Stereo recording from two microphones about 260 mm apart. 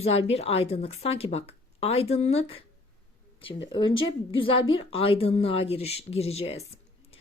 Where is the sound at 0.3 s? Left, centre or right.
Left.